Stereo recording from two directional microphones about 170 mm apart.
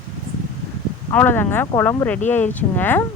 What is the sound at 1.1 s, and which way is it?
Speech, 10° left (ahead or behind).